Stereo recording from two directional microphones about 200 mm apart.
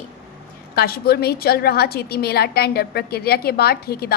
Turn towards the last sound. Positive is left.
turn(degrees=50)  # may be behind; listen again after turning